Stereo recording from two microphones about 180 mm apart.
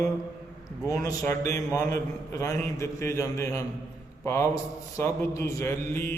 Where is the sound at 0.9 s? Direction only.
15° left (ahead or behind).